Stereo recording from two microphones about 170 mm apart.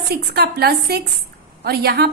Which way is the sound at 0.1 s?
65° right (ahead or behind).